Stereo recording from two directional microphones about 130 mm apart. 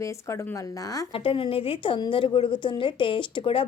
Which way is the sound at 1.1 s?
45° left (ahead or behind).